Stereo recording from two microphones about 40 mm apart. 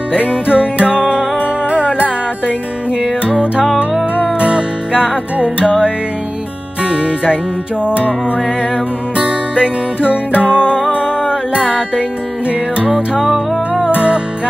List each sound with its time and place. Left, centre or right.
0.5 s music: right
3.6 s music: centre
4.2 s music: right
6.8 s music: right
9.1 s music: right
12.4 s music: right